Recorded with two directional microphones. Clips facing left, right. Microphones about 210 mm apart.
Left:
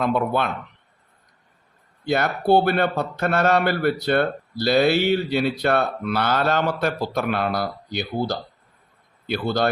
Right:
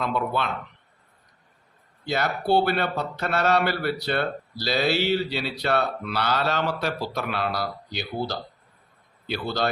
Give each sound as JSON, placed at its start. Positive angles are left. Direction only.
{"t": 0.0, "sound": "a man's voice", "side_deg": 50}
{"t": 2.0, "sound": "a man's voice", "side_deg": 55}